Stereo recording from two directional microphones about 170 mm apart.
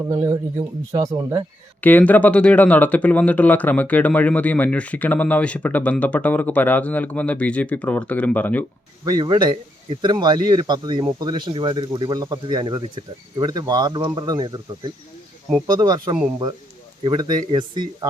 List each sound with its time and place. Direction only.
0.1 s speech: 20° right (ahead or behind)
1.8 s speech: 10° left (ahead or behind)
9.0 s speech: 25° right (ahead or behind)
15.6 s speech: 25° right (ahead or behind)